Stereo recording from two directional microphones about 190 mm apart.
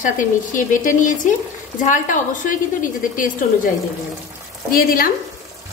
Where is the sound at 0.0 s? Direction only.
45° left (ahead or behind).